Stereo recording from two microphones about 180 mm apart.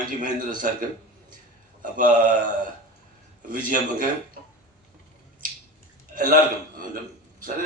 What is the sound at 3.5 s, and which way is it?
Speech, 50° right (ahead or behind).